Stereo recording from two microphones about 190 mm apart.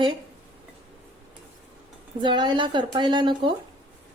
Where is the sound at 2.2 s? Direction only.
25° right (ahead or behind).